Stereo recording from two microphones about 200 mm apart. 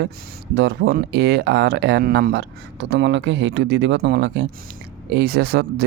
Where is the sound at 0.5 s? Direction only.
60° right (ahead or behind).